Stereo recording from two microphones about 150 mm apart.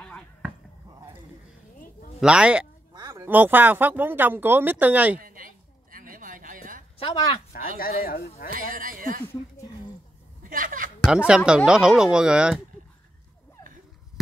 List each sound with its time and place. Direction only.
2.1 s speech: 5° right (ahead or behind)
2.9 s a sound: 25° right (ahead or behind)
3.3 s speech: 10° right (ahead or behind)
5.2 s a sound: 70° right (ahead or behind)
7.0 s speech: 40° left (ahead or behind)
7.5 s speech: 70° left (ahead or behind)
8.5 s speech: 70° right (ahead or behind)
9.2 s speech: 15° left (ahead or behind)
10.5 s a woman's voice: 65° right (ahead or behind)
11.1 s speech: 5° right (ahead or behind)